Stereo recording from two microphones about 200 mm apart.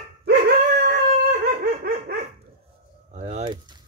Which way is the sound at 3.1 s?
35° right (ahead or behind).